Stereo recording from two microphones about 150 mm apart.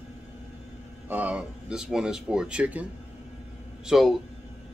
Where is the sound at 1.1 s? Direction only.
10° right (ahead or behind).